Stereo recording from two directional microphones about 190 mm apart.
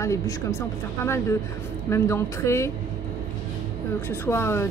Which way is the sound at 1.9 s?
15° left (ahead or behind).